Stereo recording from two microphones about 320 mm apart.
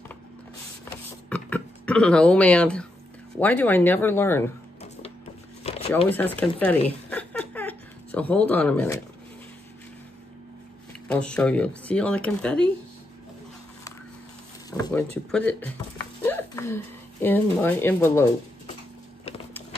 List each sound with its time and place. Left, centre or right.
1.3 s speech: centre
5.6 s a sound: centre
6.0 s speech: centre
7.1 s a sound: centre
11.1 s speech: centre
14.7 s speech: centre